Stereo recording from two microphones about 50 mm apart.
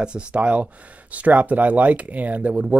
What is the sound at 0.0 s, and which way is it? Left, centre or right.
Speech, centre.